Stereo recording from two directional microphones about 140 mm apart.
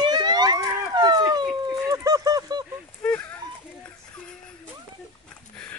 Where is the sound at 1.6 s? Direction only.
25° right (ahead or behind).